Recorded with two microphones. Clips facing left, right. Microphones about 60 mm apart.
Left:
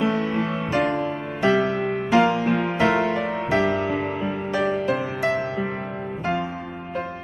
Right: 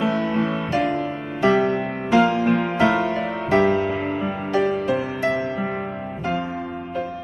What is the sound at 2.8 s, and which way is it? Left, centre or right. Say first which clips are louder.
Music: right 1 dB; centre.